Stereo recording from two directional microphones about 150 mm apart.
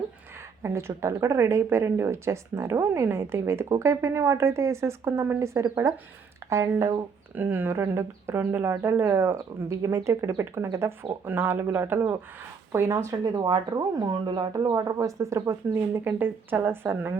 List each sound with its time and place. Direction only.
0.6 s speech: 15° right (ahead or behind)
13.1 s speech: 30° right (ahead or behind)